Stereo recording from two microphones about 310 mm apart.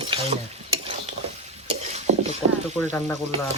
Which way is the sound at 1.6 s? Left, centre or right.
Right.